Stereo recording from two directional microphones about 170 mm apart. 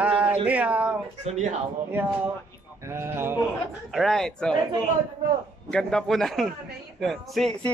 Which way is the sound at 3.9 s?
Centre (ahead or behind).